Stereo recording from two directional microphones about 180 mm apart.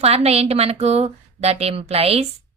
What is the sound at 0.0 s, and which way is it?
Speech, 35° right (ahead or behind).